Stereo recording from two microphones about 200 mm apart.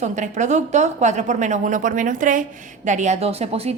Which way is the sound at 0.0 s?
35° right (ahead or behind).